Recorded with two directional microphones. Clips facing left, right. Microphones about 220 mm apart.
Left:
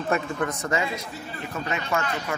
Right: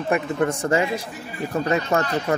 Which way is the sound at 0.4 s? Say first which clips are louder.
Right 6 dB; 30° right (ahead or behind).